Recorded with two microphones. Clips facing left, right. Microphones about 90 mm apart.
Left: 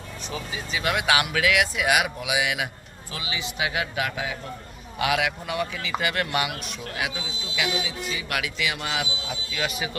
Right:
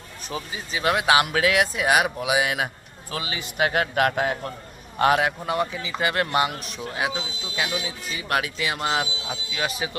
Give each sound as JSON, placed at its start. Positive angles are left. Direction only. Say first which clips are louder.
{"t": 0.3, "sound": "a man's voice", "louder": "right 1 dB", "side_deg": -30}
{"t": 4.9, "sound": "speech", "louder": "right 5 dB", "side_deg": -40}
{"t": 6.8, "sound": "speech", "louder": "right 4 dB", "side_deg": -25}